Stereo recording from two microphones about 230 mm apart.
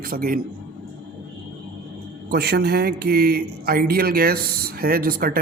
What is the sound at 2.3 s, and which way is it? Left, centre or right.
Speech, right.